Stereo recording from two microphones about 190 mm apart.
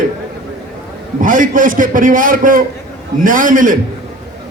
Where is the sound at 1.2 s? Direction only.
45° right (ahead or behind).